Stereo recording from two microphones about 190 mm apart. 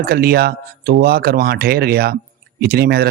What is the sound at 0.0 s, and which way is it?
Speech, 55° right (ahead or behind).